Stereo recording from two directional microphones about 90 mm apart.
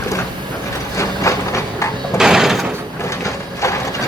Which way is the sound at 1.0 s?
35° left (ahead or behind).